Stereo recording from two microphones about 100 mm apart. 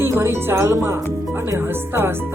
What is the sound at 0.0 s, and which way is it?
Speech, 25° right (ahead or behind).